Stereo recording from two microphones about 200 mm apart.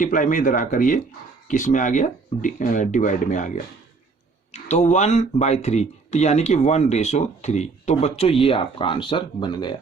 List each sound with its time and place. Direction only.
0.0 s speech: 40° left (ahead or behind); by 9.7 s 20° left (ahead or behind)